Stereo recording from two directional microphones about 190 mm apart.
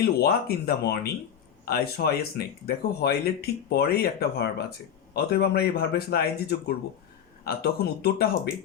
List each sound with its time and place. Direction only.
0.0 s speech: 55° left (ahead or behind)